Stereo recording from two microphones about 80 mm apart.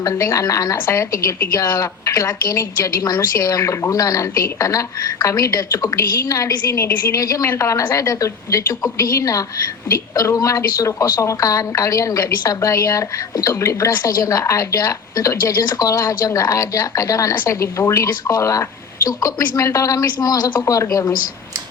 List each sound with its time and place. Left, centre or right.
0.0 s a woman's voice: left
20.1 s a woman's voice: left